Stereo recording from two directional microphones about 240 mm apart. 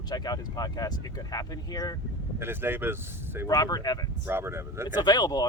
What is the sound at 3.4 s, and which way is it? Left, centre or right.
Speech, centre.